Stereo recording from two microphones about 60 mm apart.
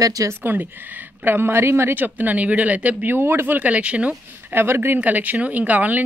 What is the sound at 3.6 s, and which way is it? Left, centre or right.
Speech, right.